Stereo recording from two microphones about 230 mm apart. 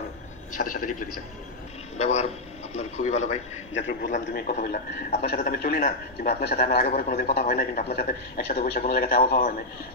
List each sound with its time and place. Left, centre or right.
0.7 s a man's voice: left